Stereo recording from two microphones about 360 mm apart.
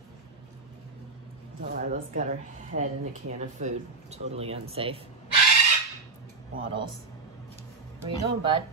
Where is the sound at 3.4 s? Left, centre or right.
Centre.